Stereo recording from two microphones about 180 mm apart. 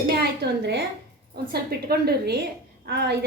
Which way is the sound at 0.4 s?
65° right (ahead or behind).